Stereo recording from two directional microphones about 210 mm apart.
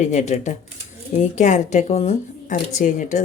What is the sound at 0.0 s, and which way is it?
A woman's voice, 35° left (ahead or behind).